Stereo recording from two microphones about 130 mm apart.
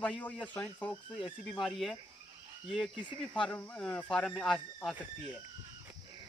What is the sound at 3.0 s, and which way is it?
Speech, 35° left (ahead or behind).